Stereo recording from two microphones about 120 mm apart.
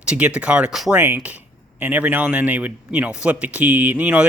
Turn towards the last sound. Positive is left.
turn(degrees=-10)  # may be behind; listen again after turning